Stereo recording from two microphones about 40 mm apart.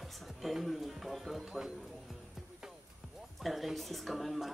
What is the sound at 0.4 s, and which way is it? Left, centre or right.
Speech, centre.